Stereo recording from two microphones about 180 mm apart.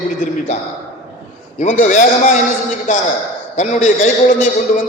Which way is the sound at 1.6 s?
45° left (ahead or behind).